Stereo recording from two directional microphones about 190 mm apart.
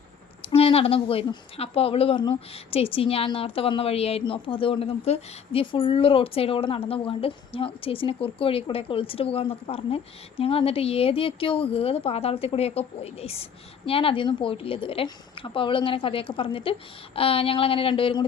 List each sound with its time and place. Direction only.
0.4 s a woman's voice: 30° left (ahead or behind)